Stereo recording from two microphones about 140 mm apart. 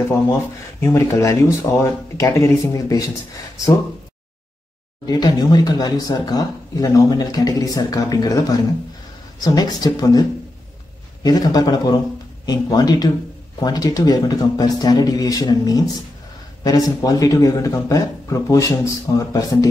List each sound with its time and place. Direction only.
0.0 s speech: 20° left (ahead or behind)
5.0 s speech: 25° left (ahead or behind)
11.2 s speech: 30° left (ahead or behind)